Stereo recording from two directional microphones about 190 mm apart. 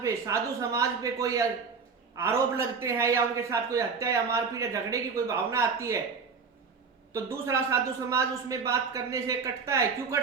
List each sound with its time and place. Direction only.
0.0 s a man's voice: 15° right (ahead or behind)
7.1 s a man's voice: 15° right (ahead or behind)